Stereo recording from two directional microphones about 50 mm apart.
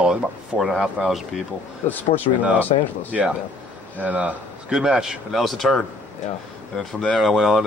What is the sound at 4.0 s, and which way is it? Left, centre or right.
Speech, right.